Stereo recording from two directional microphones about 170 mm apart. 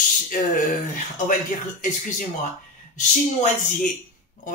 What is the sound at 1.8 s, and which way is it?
Speech, 50° left (ahead or behind).